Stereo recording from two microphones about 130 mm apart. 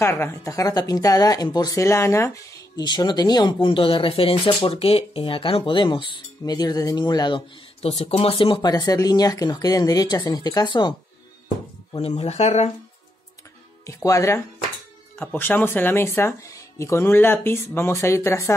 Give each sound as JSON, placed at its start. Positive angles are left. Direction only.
{"t": 0.0, "sound": "speech", "side_deg": 20}
{"t": 7.8, "sound": "speech", "side_deg": 50}
{"t": 12.2, "sound": "speech", "side_deg": 60}
{"t": 13.8, "sound": "speech", "side_deg": 25}